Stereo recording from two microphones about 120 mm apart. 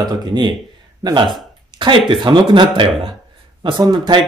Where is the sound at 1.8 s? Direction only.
45° right (ahead or behind).